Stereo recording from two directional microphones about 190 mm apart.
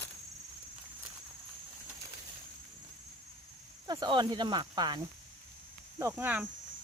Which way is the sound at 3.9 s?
20° right (ahead or behind).